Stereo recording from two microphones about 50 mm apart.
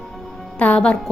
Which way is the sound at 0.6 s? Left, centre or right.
Left.